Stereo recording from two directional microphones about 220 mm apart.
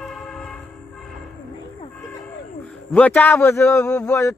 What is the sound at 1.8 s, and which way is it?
Speech, 15° left (ahead or behind).